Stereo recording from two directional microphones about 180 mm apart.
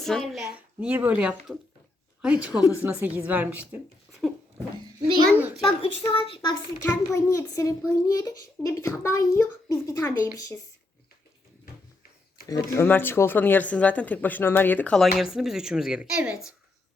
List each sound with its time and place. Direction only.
0.0 s a woman's voice: centre (ahead or behind)
4.2 s a sound: centre (ahead or behind)
5.0 s a child's voice: 25° right (ahead or behind)
5.6 s a woman's voice: 30° left (ahead or behind)
6.8 s speech: 15° left (ahead or behind)
12.5 s speech: 15° left (ahead or behind); by 16.4 s 5° right (ahead or behind)